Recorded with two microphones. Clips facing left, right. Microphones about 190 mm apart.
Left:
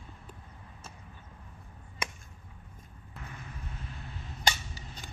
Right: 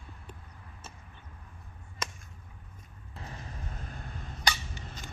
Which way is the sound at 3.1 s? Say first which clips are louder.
Right 2 dB; 35° right (ahead or behind).